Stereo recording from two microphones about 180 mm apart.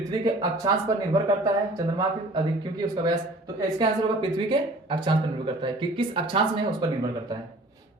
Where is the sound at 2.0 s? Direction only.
25° right (ahead or behind).